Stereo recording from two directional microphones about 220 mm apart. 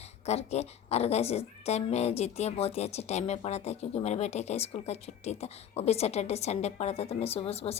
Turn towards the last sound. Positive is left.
turn(degrees=25)  # may be behind; listen again after turning